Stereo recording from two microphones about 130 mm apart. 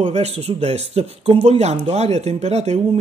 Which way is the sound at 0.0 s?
60° right (ahead or behind).